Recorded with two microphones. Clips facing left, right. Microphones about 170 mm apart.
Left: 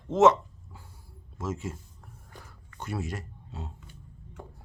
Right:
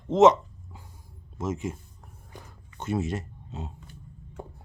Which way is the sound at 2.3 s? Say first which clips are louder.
Right 3 dB; 20° right (ahead or behind).